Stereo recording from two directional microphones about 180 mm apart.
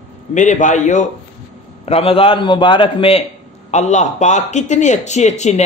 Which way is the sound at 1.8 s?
30° left (ahead or behind).